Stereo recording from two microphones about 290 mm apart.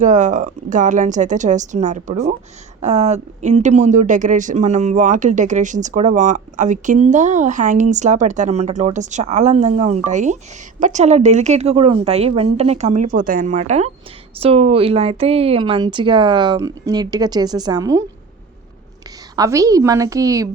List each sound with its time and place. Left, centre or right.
0.0 s speech: right
19.4 s speech: centre